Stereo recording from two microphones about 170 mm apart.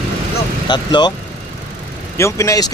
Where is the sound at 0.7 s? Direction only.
25° left (ahead or behind).